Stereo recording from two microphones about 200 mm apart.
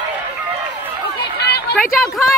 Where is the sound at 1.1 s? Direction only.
55° left (ahead or behind).